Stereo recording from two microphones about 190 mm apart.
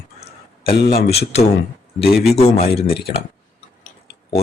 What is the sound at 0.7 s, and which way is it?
Speech, 50° left (ahead or behind).